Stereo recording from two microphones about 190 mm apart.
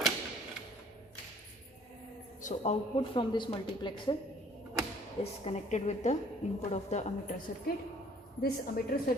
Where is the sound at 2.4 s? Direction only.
40° left (ahead or behind).